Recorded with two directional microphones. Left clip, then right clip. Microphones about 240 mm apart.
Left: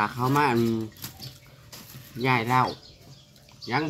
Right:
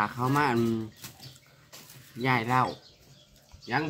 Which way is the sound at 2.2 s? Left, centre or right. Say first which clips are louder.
Left 3 dB; centre.